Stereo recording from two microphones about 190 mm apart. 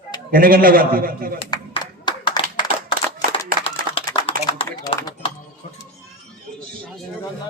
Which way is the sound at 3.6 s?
30° left (ahead or behind).